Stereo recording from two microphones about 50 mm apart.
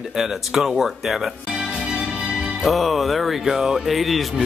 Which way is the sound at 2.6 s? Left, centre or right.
Centre.